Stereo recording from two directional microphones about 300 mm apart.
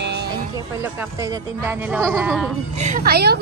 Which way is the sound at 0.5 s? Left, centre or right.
Centre.